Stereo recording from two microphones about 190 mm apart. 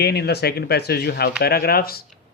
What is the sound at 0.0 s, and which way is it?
Speech, 60° left (ahead or behind).